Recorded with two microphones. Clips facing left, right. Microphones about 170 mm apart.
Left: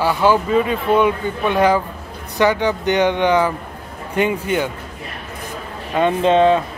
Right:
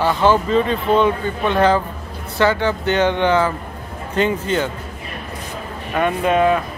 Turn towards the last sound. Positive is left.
turn(degrees=25)  # may be behind; listen again after turning